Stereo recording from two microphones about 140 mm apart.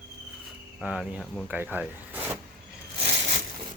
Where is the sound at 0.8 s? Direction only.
Centre (ahead or behind).